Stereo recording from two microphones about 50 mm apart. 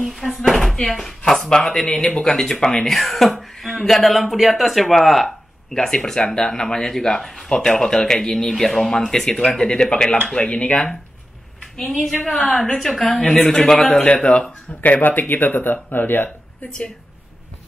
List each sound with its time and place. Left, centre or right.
0.0 s speech: centre
0.4 s a sound: centre
0.8 s speech: centre
5.0 s a sound: centre
5.9 s speech: centre
12.5 s speech: centre
13.2 s speech: centre
13.8 s speech: left
15.0 s speech: left
16.6 s speech: centre